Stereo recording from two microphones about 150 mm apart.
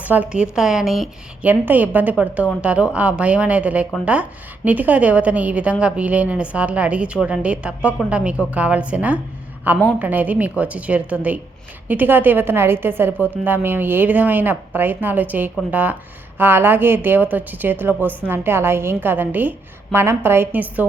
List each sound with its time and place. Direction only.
0.0 s a woman's voice: 10° right (ahead or behind)